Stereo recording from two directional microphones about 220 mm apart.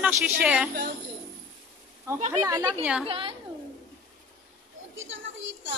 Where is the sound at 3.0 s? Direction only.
25° right (ahead or behind).